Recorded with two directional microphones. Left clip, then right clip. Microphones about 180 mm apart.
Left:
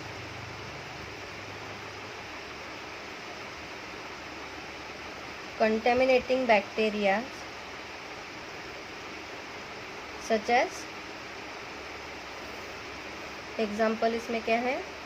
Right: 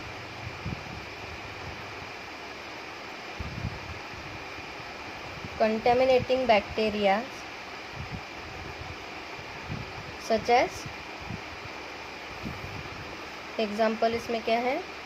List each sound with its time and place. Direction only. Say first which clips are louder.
5.5 s speech: right 1 dB; 20° right (ahead or behind)
10.2 s speech: right 2 dB; 25° right (ahead or behind)
13.7 s speech: right 2 dB; 20° right (ahead or behind)